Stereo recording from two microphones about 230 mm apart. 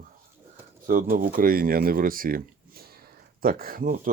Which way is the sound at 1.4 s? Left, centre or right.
Right.